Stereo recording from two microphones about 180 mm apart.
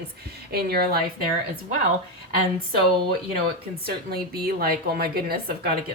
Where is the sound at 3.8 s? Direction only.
60° right (ahead or behind).